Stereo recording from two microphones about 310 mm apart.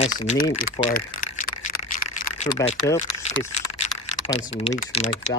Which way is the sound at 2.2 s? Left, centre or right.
Left.